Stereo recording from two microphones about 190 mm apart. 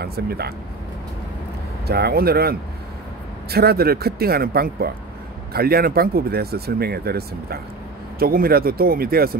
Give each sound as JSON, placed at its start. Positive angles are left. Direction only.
{"t": 0.0, "sound": "speech", "side_deg": -55}
{"t": 1.9, "sound": "speech", "side_deg": -55}